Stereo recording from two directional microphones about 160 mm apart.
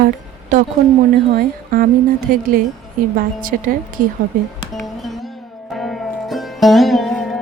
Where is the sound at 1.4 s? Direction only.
65° right (ahead or behind).